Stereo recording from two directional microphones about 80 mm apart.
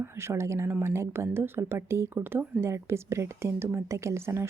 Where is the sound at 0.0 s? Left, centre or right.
Right.